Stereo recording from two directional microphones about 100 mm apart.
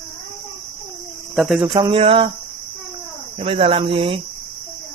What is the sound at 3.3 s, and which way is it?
Speech, 70° right (ahead or behind).